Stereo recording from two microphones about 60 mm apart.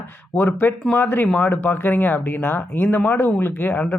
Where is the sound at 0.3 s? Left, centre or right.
Left.